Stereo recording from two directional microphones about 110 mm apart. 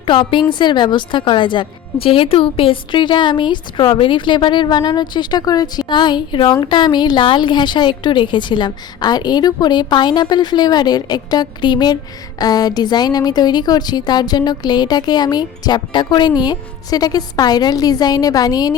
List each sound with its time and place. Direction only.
0.0 s a woman's voice: 50° left (ahead or behind)